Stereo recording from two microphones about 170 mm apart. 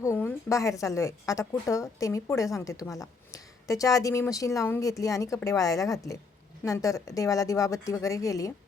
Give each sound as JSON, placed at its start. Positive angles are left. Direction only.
{"t": 0.0, "sound": "a woman's voice", "side_deg": 15}